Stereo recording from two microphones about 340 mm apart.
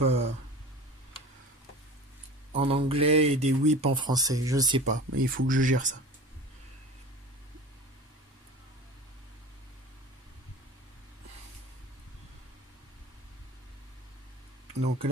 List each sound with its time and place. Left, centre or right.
0.0 s speech: centre
2.5 s speech: centre
4.9 s speech: right
5.5 s speech: right